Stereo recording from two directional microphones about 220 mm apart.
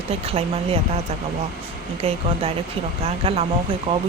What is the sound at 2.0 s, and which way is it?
Speech, 30° right (ahead or behind).